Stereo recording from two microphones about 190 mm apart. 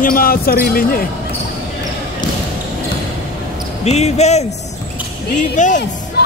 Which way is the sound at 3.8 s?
35° left (ahead or behind).